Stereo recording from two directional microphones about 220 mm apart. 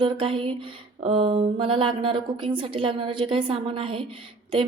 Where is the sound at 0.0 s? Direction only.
25° right (ahead or behind).